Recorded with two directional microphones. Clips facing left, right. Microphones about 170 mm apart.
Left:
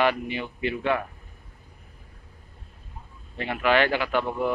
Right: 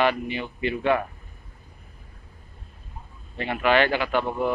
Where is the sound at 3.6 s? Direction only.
5° left (ahead or behind).